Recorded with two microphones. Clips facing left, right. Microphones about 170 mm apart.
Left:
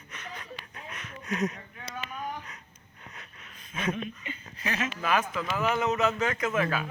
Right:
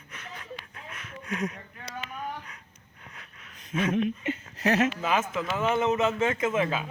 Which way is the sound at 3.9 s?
70° right (ahead or behind).